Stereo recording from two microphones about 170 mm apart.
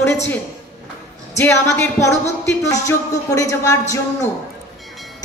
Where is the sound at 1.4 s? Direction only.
15° left (ahead or behind).